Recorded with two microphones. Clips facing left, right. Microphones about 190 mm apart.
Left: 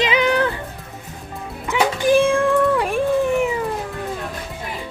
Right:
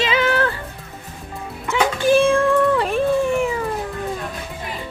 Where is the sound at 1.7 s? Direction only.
15° left (ahead or behind).